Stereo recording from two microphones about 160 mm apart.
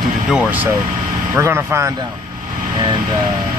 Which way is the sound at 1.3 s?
15° right (ahead or behind).